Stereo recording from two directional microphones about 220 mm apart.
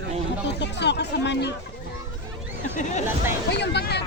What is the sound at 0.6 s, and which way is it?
Speech, 50° left (ahead or behind).